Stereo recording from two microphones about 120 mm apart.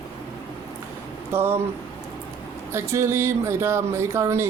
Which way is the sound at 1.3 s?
20° right (ahead or behind).